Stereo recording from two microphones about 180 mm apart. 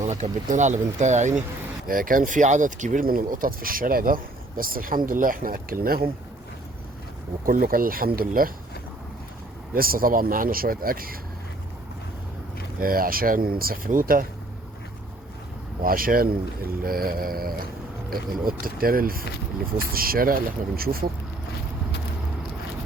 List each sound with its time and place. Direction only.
0.0 s speech: 40° right (ahead or behind)
7.4 s speech: 50° right (ahead or behind)
9.7 s speech: 55° right (ahead or behind)
12.8 s speech: 55° right (ahead or behind)
15.8 s speech: 50° right (ahead or behind)